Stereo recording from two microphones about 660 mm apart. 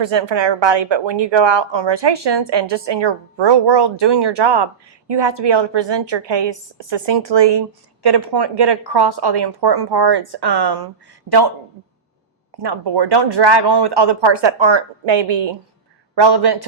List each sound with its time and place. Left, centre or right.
0.0 s a woman's voice: right